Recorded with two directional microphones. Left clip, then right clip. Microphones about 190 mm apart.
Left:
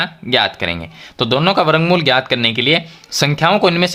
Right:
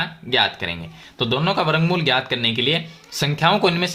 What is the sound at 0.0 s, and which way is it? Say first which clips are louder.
Speech: left 4 dB; 40° left (ahead or behind).